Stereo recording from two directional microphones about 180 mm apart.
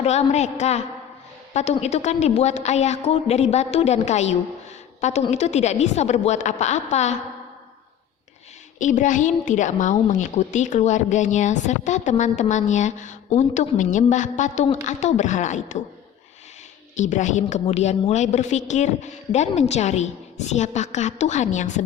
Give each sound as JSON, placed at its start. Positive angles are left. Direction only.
{"t": 0.0, "sound": "a woman's voice", "side_deg": 35}
{"t": 8.8, "sound": "a woman's voice", "side_deg": 45}
{"t": 17.0, "sound": "a woman's voice", "side_deg": 40}